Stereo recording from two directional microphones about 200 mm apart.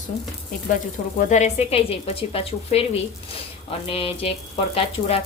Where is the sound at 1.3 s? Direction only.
35° left (ahead or behind).